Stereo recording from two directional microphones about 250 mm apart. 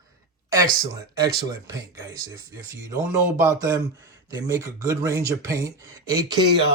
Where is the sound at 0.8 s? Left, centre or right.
Centre.